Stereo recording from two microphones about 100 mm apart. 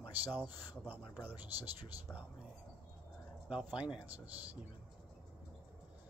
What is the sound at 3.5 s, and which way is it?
Speech, 10° right (ahead or behind).